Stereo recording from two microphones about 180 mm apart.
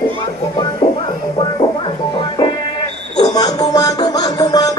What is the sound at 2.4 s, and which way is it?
Music, 20° left (ahead or behind).